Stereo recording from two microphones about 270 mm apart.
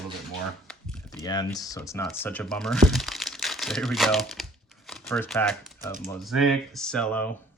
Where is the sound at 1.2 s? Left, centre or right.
Centre.